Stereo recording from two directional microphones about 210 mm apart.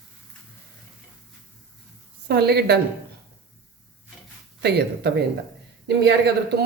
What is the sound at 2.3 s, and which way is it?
Speech, 50° right (ahead or behind).